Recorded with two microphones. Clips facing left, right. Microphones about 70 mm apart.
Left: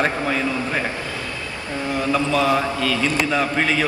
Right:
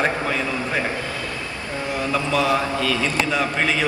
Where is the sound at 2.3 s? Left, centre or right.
Centre.